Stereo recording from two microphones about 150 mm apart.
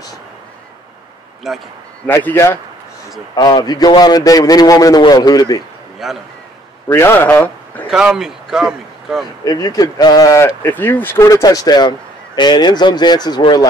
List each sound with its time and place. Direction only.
1.5 s a man's voice: centre (ahead or behind)
2.0 s a man's voice: 15° left (ahead or behind)
3.3 s speech: 30° left (ahead or behind)
6.0 s a man's voice: centre (ahead or behind)
6.9 s speech: 15° left (ahead or behind)
7.9 s speech: 5° right (ahead or behind)
9.4 s speech: 25° left (ahead or behind)